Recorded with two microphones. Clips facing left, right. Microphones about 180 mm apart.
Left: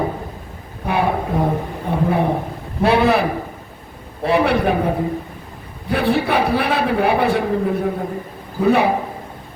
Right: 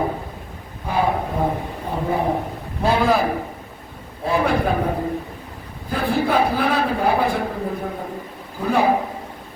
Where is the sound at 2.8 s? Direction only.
70° left (ahead or behind).